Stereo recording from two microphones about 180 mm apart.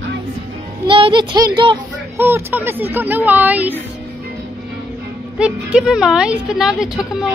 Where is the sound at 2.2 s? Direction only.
10° right (ahead or behind).